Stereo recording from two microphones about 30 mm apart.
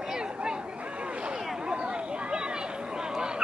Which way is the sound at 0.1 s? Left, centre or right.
Right.